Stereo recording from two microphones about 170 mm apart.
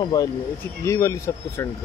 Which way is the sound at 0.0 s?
25° left (ahead or behind).